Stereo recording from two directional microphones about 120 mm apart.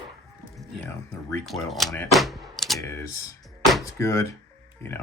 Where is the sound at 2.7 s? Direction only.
20° left (ahead or behind).